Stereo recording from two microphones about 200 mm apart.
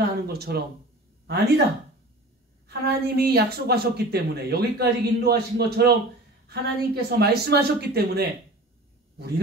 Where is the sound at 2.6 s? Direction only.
50° right (ahead or behind).